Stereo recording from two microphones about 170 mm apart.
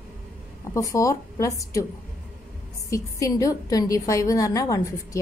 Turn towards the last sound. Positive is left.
turn(degrees=20)  # may be behind; listen again after turning